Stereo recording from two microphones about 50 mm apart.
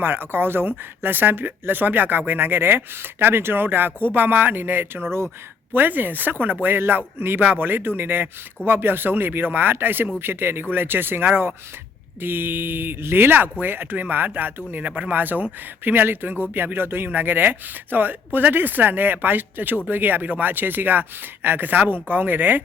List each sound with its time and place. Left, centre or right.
0.0 s speech: right